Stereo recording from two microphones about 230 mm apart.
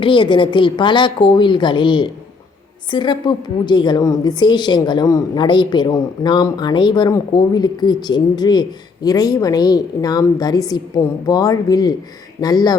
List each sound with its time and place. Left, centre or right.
0.0 s a woman's voice: left